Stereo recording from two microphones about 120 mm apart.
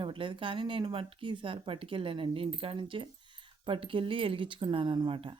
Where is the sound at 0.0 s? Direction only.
45° right (ahead or behind).